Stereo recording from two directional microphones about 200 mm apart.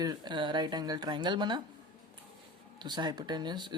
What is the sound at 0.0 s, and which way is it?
Speech, 20° right (ahead or behind).